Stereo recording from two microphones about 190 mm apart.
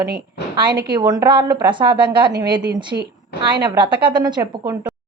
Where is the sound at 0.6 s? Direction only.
25° right (ahead or behind).